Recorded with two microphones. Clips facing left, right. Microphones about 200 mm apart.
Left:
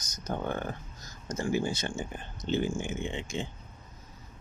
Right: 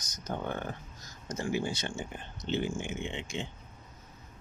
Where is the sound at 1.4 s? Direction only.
45° left (ahead or behind).